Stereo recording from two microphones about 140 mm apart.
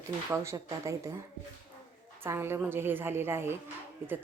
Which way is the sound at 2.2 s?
15° right (ahead or behind).